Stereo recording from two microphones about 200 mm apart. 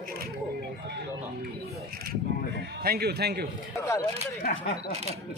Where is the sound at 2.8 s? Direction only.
50° right (ahead or behind).